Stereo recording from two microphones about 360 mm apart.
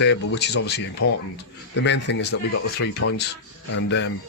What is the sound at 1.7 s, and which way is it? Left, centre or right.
Speech, left.